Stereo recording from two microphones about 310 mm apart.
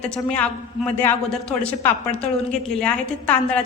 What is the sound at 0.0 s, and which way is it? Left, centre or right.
A woman's voice, centre.